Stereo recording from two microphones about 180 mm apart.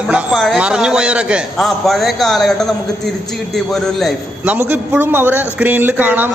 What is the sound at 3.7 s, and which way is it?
A man's voice, 5° right (ahead or behind).